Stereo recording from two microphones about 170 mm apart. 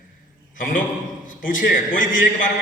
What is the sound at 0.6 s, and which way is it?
A man's voice, 55° left (ahead or behind).